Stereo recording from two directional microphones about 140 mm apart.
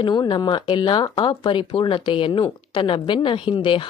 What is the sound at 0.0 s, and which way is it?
A woman's voice, 35° left (ahead or behind).